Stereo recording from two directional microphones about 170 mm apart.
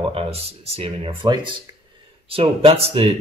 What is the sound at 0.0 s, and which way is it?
Speech, 35° right (ahead or behind).